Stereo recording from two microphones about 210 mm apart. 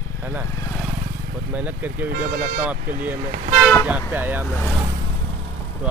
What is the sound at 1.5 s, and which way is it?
Speech, 5° right (ahead or behind).